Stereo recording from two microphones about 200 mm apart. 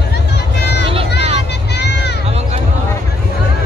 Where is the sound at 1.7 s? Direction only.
55° left (ahead or behind).